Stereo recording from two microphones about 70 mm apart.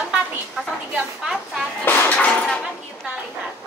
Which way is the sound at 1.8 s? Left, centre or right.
Left.